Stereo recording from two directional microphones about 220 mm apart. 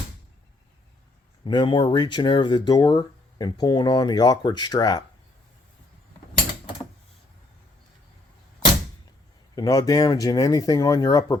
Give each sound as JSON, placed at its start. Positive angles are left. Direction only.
{"t": 1.5, "sound": "speech", "side_deg": 20}
{"t": 9.6, "sound": "speech", "side_deg": 15}